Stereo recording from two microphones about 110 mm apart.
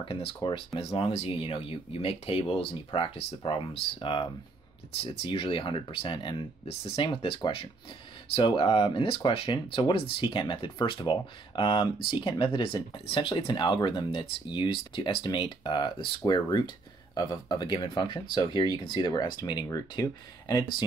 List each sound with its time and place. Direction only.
0.0 s speech: 55° left (ahead or behind); by 20.6 s 35° left (ahead or behind)